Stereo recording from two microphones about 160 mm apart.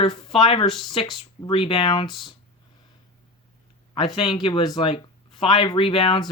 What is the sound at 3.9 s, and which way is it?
Speech, 30° left (ahead or behind).